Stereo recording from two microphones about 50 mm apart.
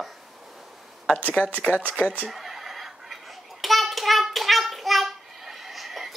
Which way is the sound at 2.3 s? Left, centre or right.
Centre.